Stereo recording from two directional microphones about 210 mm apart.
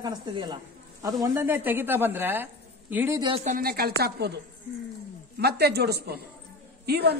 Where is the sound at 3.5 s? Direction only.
45° right (ahead or behind).